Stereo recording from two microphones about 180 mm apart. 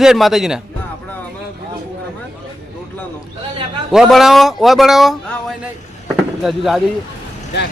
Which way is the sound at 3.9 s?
Centre (ahead or behind).